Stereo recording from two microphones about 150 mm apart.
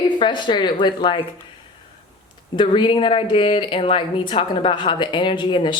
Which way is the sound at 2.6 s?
30° left (ahead or behind).